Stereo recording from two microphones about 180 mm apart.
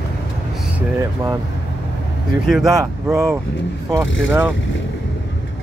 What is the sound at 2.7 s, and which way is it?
Speech, 15° right (ahead or behind).